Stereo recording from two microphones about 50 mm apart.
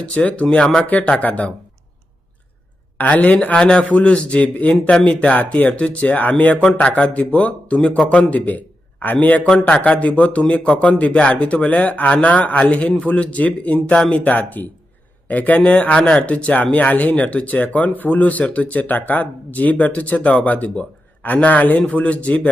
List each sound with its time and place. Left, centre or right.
0.0 s speech: left
3.0 s speech: left
5.3 s a man's voice: left
9.5 s speech: centre
14.1 s speech: left